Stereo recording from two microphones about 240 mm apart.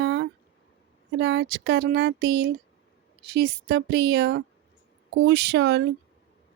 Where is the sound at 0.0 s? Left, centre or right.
Right.